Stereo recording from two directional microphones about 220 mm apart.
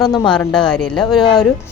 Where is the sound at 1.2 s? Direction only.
20° left (ahead or behind).